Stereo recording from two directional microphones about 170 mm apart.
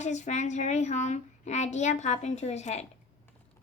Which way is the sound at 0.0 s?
40° left (ahead or behind).